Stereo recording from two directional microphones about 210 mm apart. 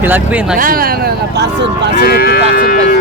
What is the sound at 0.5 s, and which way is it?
Speech, 40° right (ahead or behind).